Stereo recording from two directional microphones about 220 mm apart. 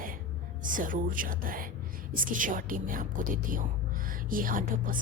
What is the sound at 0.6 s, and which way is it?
A woman's voice, 35° right (ahead or behind).